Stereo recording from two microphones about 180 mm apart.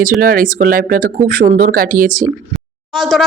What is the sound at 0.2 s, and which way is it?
Speech, 50° right (ahead or behind).